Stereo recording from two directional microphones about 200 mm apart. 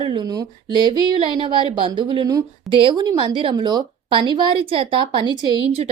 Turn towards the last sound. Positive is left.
turn(degrees=-25)  # may be behind; listen again after turning